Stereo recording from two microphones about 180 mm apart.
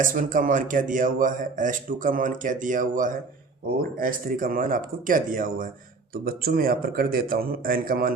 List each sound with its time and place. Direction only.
0.0 s speech: 50° right (ahead or behind)